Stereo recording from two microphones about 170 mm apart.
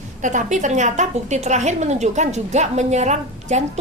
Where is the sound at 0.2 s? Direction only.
45° right (ahead or behind).